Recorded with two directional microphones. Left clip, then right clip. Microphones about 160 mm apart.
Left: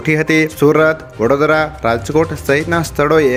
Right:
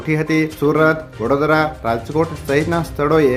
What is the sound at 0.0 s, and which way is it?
Speech, 25° left (ahead or behind).